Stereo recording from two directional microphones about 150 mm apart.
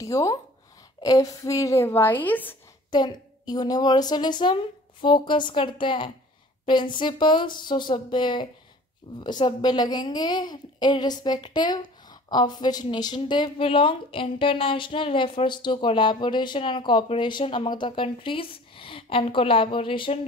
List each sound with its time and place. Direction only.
0.0 s a woman's voice: 20° left (ahead or behind)
2.9 s a woman's voice: 30° left (ahead or behind)